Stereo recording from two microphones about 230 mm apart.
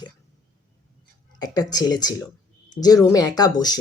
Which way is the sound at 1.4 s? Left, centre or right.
Centre.